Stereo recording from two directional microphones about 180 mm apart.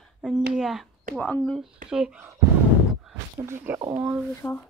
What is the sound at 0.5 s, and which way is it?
Speech, centre (ahead or behind).